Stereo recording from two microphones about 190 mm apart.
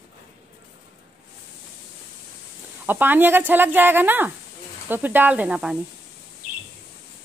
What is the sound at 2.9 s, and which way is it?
Speech, 10° right (ahead or behind).